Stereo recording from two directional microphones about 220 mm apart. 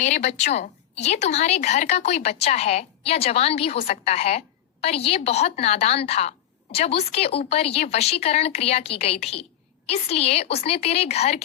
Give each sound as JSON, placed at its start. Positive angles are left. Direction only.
{"t": 0.0, "sound": "a woman's voice", "side_deg": 30}